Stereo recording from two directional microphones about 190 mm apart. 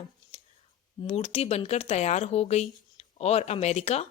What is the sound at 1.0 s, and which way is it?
Speech, 30° left (ahead or behind).